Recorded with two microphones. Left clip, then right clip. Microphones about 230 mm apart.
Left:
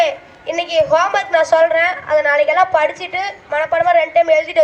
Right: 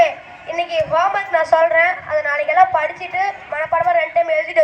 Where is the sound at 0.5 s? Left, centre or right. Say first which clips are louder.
Left 4 dB; left.